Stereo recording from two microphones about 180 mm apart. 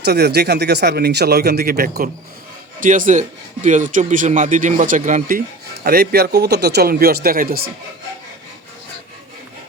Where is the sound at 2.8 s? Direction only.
45° right (ahead or behind).